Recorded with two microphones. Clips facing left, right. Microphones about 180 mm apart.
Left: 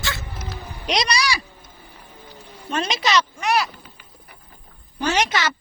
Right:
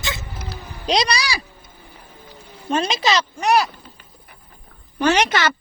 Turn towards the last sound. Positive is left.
turn(degrees=-60)  # may be behind; listen again after turning